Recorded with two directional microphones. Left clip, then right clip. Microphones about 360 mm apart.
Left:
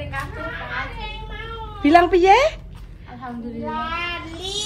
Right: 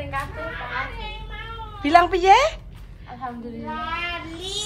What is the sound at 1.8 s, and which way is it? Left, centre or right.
Speech, centre.